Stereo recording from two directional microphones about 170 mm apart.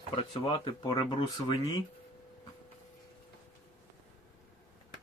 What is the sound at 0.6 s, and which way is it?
Speech, 30° left (ahead or behind).